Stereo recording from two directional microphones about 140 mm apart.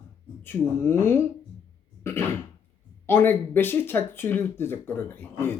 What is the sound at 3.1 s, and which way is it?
Speech, 15° left (ahead or behind).